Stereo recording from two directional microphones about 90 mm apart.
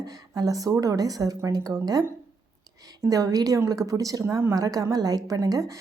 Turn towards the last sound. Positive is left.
turn(degrees=-40)  # may be behind; listen again after turning